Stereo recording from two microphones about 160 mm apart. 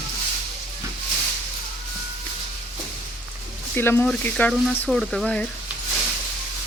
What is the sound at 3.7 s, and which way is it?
Speech, 15° left (ahead or behind).